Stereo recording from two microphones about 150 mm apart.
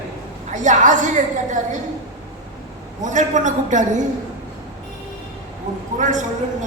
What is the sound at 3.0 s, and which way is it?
A man's voice, 55° right (ahead or behind).